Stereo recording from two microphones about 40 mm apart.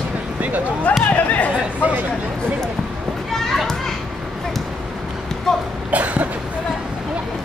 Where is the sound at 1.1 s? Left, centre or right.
Left.